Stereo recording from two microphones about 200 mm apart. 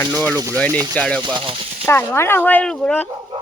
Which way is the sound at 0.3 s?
15° right (ahead or behind).